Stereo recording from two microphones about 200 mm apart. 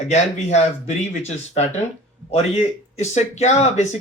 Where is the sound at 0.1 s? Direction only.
35° left (ahead or behind).